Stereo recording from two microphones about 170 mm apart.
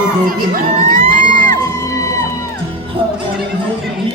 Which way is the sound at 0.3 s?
55° right (ahead or behind).